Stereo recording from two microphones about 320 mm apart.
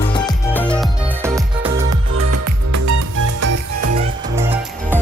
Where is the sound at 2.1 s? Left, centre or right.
Right.